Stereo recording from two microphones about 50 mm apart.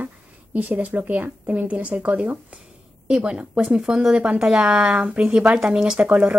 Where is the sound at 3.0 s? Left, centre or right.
Centre.